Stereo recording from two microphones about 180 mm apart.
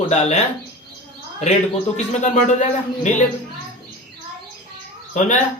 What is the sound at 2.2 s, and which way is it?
Speech, 40° left (ahead or behind).